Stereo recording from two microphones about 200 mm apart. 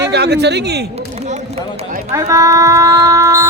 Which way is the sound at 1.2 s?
35° right (ahead or behind).